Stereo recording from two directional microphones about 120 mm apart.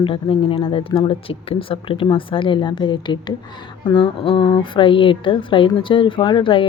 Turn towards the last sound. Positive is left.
turn(degrees=45)  # may be behind; listen again after turning